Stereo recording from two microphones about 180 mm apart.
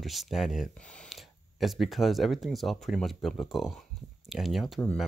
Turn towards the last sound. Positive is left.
turn(degrees=5)  # may be behind; listen again after turning